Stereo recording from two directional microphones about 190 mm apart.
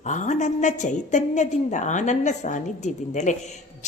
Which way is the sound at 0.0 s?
40° left (ahead or behind).